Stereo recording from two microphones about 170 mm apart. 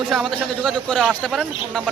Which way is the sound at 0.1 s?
Centre (ahead or behind).